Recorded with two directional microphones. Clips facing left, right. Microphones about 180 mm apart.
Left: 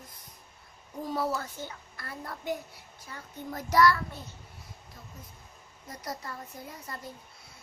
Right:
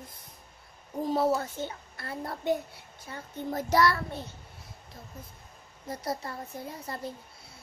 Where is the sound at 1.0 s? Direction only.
25° right (ahead or behind).